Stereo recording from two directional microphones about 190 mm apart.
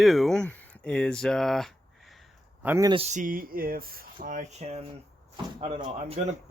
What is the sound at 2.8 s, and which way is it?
Speech, 30° right (ahead or behind).